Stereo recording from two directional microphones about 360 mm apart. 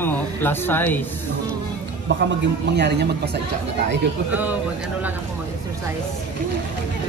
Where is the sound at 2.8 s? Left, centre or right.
Right.